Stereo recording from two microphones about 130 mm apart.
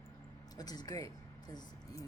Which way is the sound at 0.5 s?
30° left (ahead or behind).